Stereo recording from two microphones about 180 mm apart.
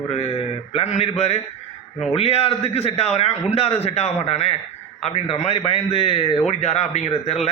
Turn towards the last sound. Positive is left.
turn(degrees=35)  # may be behind; listen again after turning